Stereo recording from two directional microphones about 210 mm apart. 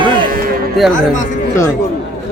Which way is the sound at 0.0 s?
25° right (ahead or behind).